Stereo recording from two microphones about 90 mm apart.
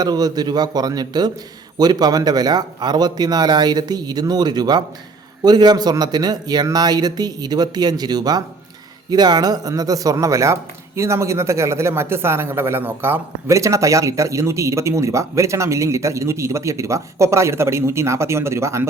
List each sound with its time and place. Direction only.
0.0 s a man's voice: 45° right (ahead or behind); by 18.9 s 30° right (ahead or behind)